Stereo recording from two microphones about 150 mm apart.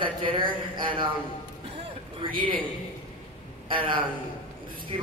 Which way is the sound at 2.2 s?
35° right (ahead or behind).